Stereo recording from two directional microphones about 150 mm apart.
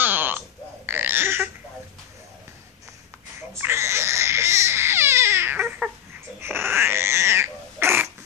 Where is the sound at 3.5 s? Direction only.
15° right (ahead or behind).